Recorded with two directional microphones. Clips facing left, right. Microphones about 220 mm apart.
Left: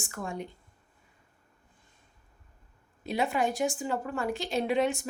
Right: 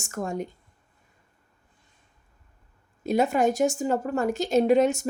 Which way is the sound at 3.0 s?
45° right (ahead or behind).